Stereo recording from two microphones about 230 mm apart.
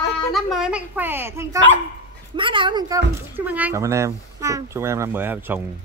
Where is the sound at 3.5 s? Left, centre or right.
Centre.